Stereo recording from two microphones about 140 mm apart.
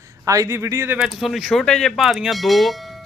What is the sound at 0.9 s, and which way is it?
A man's voice, 5° right (ahead or behind).